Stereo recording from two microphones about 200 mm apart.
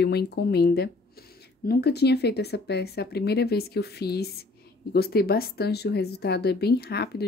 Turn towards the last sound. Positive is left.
turn(degrees=55)  # may be behind; listen again after turning